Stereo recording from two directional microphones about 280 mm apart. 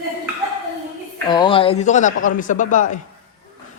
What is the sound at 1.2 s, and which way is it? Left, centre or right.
A man's voice, centre.